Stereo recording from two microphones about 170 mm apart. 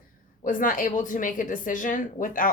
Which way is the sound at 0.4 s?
55° left (ahead or behind).